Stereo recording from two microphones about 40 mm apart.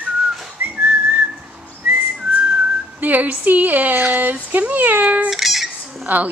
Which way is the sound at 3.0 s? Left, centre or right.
Right.